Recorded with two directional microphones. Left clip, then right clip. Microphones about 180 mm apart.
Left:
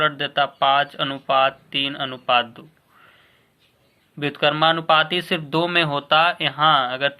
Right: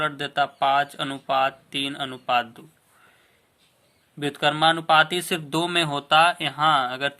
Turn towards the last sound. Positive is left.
turn(degrees=-30)  # may be behind; listen again after turning